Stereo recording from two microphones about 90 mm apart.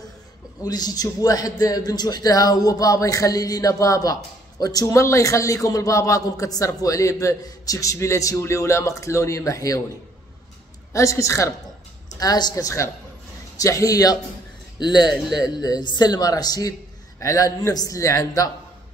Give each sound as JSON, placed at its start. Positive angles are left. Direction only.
{"t": 0.7, "sound": "a man's voice", "side_deg": 45}
{"t": 10.9, "sound": "a man's voice", "side_deg": 35}
{"t": 12.2, "sound": "a man's voice", "side_deg": 45}
{"t": 14.8, "sound": "a man's voice", "side_deg": 55}